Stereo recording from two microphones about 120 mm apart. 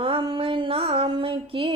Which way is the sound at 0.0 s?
45° right (ahead or behind).